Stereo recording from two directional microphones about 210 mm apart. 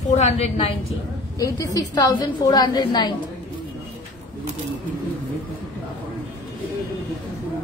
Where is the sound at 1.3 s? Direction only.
15° left (ahead or behind).